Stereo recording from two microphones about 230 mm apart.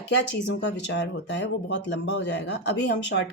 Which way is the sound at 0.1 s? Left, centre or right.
Left.